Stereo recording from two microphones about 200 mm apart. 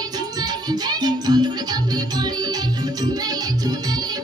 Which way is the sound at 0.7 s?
20° right (ahead or behind).